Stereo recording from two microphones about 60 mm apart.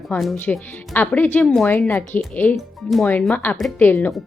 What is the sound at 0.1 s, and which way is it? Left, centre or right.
Speech, left.